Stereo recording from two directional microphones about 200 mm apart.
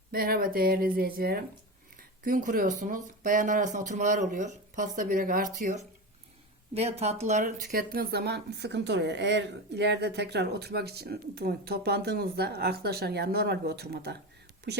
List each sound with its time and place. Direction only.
0.1 s speech: 50° right (ahead or behind)